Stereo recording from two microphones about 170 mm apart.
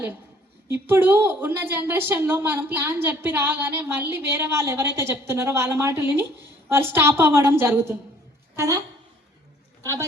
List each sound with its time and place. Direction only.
0.7 s a woman's voice: 15° right (ahead or behind)